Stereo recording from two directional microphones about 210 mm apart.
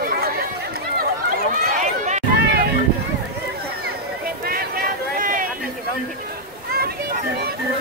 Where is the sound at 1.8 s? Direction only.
35° right (ahead or behind).